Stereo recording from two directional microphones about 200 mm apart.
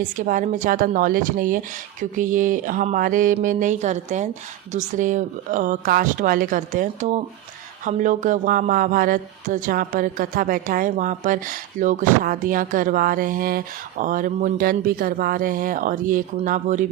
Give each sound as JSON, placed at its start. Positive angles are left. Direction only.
{"t": 0.2, "sound": "speech", "side_deg": -40}